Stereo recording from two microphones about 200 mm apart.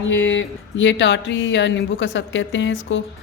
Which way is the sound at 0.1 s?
70° left (ahead or behind).